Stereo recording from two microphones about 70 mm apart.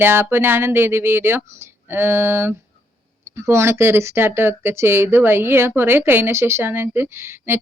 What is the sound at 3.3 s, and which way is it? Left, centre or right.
A woman's voice, right.